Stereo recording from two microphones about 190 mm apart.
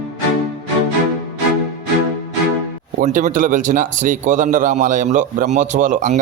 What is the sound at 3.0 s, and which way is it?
Speech, 45° right (ahead or behind).